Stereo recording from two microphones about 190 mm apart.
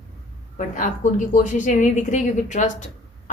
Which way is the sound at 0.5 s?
45° left (ahead or behind).